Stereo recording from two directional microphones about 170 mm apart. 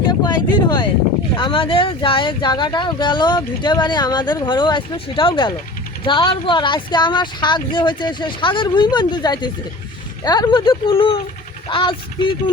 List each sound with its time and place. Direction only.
0.3 s speech: 25° left (ahead or behind)